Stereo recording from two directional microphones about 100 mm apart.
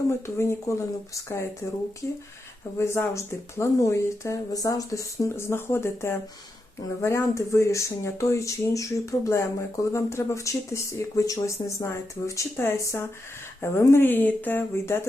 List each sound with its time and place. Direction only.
0.1 s speech: 30° left (ahead or behind)
2.7 s speech: 25° left (ahead or behind)